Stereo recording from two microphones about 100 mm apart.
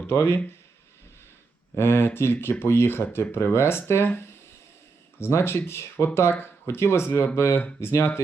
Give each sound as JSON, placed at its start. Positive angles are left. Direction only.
{"t": 0.1, "sound": "speech", "side_deg": 25}
{"t": 1.7, "sound": "speech", "side_deg": 25}